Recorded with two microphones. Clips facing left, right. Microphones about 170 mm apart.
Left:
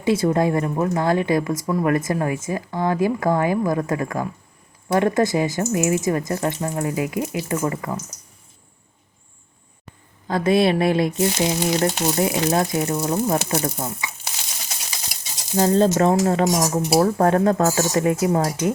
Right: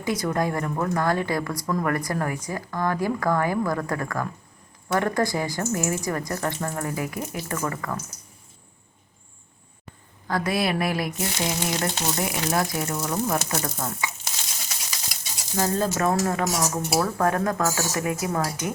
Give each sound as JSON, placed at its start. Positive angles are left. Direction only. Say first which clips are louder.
{"t": 0.0, "sound": "speech", "louder": "left 6 dB", "side_deg": 25}
{"t": 10.2, "sound": "speech", "louder": "left 7 dB", "side_deg": 25}
{"t": 15.5, "sound": "speech", "louder": "left 7 dB", "side_deg": 25}